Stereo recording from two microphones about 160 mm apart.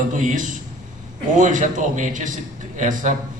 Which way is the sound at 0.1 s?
55° right (ahead or behind).